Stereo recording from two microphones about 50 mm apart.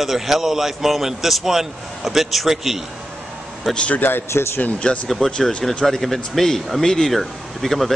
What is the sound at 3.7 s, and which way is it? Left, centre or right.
Speech, left.